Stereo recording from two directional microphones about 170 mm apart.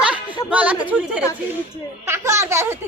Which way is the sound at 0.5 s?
10° right (ahead or behind).